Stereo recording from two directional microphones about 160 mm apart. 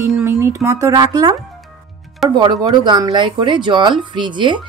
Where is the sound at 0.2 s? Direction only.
15° right (ahead or behind).